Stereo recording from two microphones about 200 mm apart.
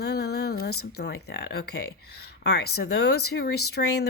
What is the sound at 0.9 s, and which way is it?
Speech, 55° left (ahead or behind).